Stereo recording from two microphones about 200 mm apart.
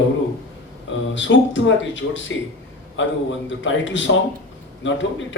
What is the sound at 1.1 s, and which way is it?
A man's voice, 65° left (ahead or behind).